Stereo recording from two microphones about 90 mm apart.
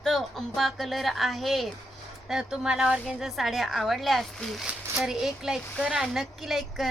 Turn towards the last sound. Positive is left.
turn(degrees=0)  # may be behind; listen again after turning